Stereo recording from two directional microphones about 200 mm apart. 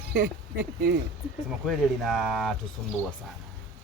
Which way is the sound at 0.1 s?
50° right (ahead or behind).